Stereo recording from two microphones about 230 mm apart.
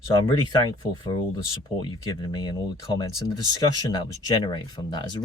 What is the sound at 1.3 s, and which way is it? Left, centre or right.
Speech, centre.